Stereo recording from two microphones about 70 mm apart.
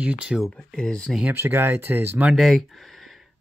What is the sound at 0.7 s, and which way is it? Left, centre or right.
Speech, centre.